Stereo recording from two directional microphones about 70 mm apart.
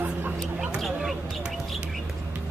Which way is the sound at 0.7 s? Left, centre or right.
Centre.